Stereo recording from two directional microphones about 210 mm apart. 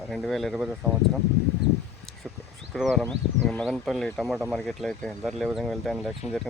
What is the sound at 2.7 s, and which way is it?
Speech, centre (ahead or behind).